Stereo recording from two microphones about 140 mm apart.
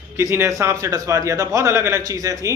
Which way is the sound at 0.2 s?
20° right (ahead or behind).